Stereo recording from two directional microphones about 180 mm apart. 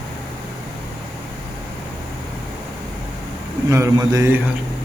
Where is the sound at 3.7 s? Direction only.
15° right (ahead or behind).